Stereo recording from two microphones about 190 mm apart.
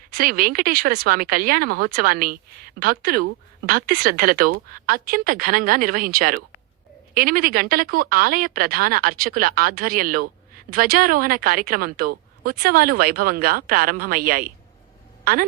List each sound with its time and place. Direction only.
0.1 s a woman's voice: 50° right (ahead or behind)